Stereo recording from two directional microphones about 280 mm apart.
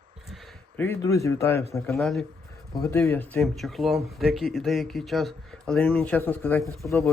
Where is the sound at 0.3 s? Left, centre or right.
Centre.